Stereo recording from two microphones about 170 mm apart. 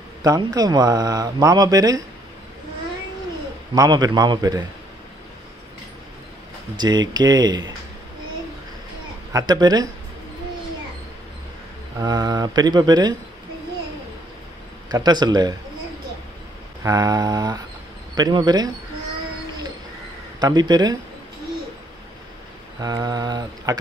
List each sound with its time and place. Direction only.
0.2 s speech: 20° right (ahead or behind)
3.7 s speech: 20° right (ahead or behind)
6.8 s speech: 25° right (ahead or behind)
9.3 s speech: 20° right (ahead or behind)
12.0 s speech: 25° right (ahead or behind)
14.9 s speech: 25° right (ahead or behind)
16.8 s speech: 25° right (ahead or behind)
20.3 s speech: 25° right (ahead or behind)
22.8 s speech: 25° right (ahead or behind)